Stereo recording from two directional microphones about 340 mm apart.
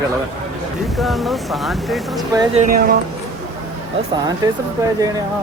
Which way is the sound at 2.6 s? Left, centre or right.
Right.